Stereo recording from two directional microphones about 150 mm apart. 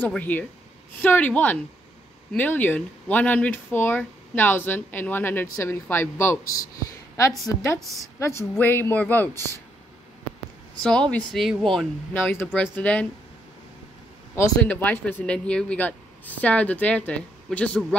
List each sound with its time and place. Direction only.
0.0 s a woman's voice: 10° left (ahead or behind)
10.8 s speech: 5° left (ahead or behind)
12.1 s speech: 15° left (ahead or behind)
14.3 s speech: 15° left (ahead or behind)